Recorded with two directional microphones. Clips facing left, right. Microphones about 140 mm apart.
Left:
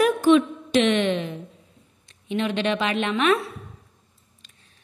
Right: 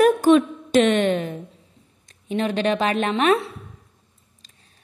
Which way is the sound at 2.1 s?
40° right (ahead or behind).